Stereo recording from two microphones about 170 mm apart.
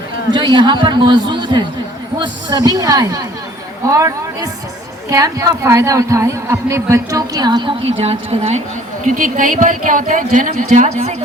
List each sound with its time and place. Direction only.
0.3 s a woman's voice: 25° right (ahead or behind)
9.0 s speech: 50° right (ahead or behind)